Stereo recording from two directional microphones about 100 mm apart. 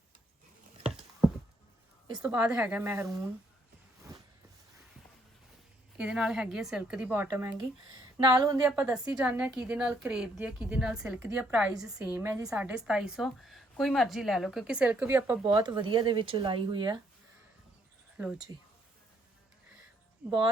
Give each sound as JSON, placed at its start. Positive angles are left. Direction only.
{"t": 2.2, "sound": "a woman's voice", "side_deg": -10}
{"t": 2.8, "sound": "speech", "side_deg": -25}
{"t": 6.0, "sound": "a woman's voice", "side_deg": -5}
{"t": 8.3, "sound": "speech", "side_deg": -40}
{"t": 8.6, "sound": "a woman's voice", "side_deg": -10}
{"t": 11.7, "sound": "a woman's voice", "side_deg": -5}
{"t": 12.1, "sound": "a woman's voice", "side_deg": -20}
{"t": 15.4, "sound": "speech", "side_deg": -45}
{"t": 18.2, "sound": "speech", "side_deg": -10}
{"t": 20.2, "sound": "a woman's voice", "side_deg": -10}